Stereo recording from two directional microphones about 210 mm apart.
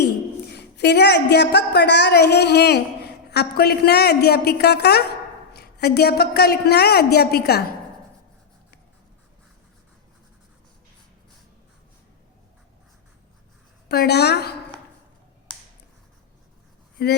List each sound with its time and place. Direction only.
0.5 s a woman's voice: 55° left (ahead or behind)
13.8 s a woman's voice: 50° left (ahead or behind)
17.0 s speech: 50° left (ahead or behind)